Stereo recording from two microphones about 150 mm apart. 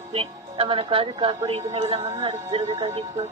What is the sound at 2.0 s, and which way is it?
Speech, 25° right (ahead or behind).